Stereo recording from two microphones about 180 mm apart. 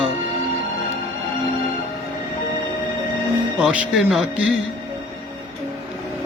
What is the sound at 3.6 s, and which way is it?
Speech, 5° right (ahead or behind).